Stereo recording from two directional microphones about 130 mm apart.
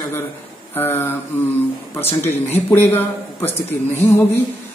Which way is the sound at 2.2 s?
15° left (ahead or behind).